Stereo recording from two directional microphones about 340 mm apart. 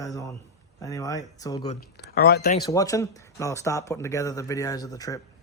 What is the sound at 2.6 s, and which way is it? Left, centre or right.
Speech, centre.